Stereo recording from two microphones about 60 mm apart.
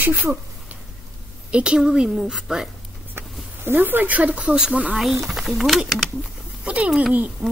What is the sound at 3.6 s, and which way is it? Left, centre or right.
Speech, right.